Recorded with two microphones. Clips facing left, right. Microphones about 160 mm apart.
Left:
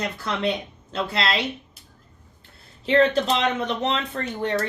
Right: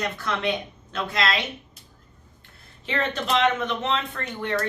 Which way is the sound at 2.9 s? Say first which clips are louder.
Left 8 dB; 35° left (ahead or behind).